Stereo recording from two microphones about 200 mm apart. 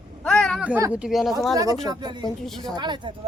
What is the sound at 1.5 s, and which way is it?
Speech, 20° right (ahead or behind).